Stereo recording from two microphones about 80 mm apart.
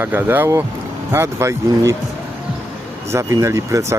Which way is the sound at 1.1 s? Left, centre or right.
Right.